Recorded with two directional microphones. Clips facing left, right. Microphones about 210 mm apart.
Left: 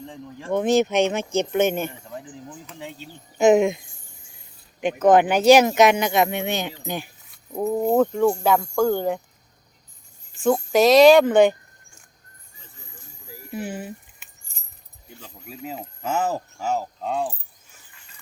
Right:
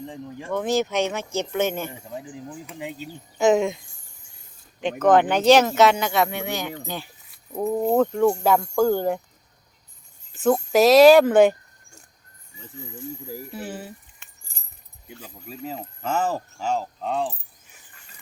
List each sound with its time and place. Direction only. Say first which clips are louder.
0.0 s speech: right 3 dB; 15° right (ahead or behind)
0.5 s speech: left 4 dB; 20° left (ahead or behind)
1.9 s speech: right 2 dB; 15° right (ahead or behind)
3.3 s speech: left 3 dB; 15° left (ahead or behind)
4.8 s speech: left 1 dB; 10° left (ahead or behind)
7.3 s speech: even; centre (ahead or behind)
10.3 s speech: even; 5° right (ahead or behind)
13.5 s speech: left 8 dB; 15° left (ahead or behind)
15.4 s speech: right 1 dB; 5° left (ahead or behind)